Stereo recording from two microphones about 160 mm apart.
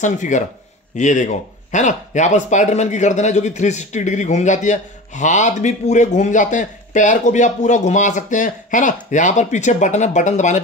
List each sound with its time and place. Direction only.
0.0 s speech: 50° left (ahead or behind)